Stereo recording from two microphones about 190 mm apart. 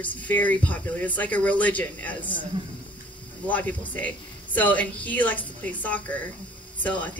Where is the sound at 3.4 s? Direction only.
10° left (ahead or behind).